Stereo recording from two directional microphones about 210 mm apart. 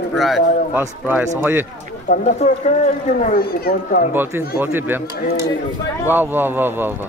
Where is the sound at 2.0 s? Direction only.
35° left (ahead or behind).